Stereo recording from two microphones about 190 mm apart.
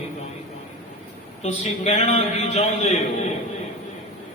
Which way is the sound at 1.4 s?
35° left (ahead or behind).